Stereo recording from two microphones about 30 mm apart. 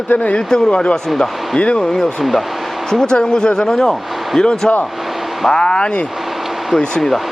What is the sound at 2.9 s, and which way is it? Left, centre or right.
Speech, left.